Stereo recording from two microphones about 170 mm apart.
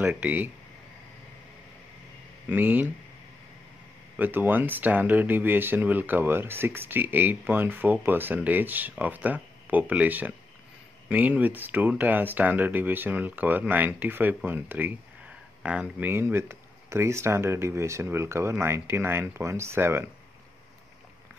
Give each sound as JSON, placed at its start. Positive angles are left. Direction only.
{"t": 0.0, "sound": "speech", "side_deg": -10}
{"t": 2.5, "sound": "speech", "side_deg": -10}
{"t": 4.2, "sound": "speech", "side_deg": -10}